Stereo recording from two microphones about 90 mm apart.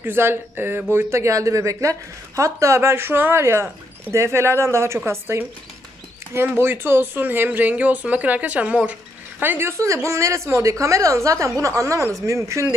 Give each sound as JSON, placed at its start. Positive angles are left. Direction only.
{"t": 0.0, "sound": "speech", "side_deg": -25}
{"t": 6.3, "sound": "speech", "side_deg": -25}